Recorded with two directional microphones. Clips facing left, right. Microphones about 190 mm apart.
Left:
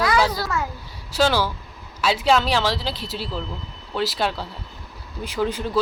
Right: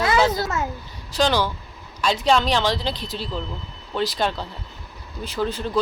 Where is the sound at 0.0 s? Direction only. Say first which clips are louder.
Right 1 dB; 25° right (ahead or behind).